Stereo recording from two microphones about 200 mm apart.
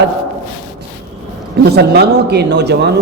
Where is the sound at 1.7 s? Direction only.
55° right (ahead or behind).